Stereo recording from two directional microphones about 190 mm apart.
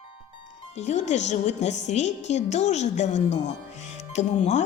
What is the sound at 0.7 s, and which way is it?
Speech, 35° left (ahead or behind).